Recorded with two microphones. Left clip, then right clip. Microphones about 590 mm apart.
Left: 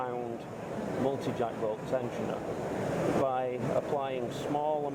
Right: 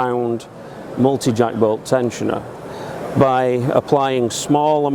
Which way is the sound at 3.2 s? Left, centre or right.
Right.